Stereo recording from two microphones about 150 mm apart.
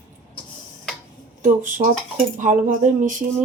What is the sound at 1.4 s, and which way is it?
Speech, 60° right (ahead or behind).